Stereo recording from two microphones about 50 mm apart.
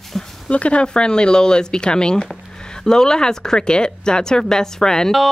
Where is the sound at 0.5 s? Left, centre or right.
Left.